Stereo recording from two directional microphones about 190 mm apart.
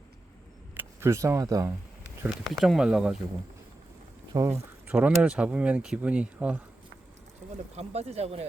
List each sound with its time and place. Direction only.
0.7 s speech: 10° right (ahead or behind)
2.2 s speech: centre (ahead or behind)
4.4 s speech: 15° right (ahead or behind)
7.8 s speech: 35° right (ahead or behind)